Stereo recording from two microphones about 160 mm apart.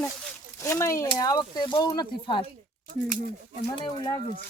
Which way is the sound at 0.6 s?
20° left (ahead or behind).